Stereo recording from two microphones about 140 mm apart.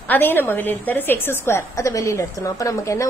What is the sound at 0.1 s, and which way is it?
A woman's voice, 15° left (ahead or behind).